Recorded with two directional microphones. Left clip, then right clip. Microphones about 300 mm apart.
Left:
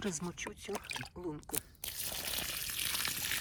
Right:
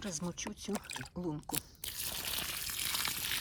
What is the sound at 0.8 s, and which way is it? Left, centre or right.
Speech, left.